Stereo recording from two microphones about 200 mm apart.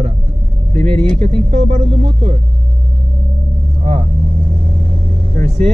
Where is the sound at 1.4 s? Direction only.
30° right (ahead or behind).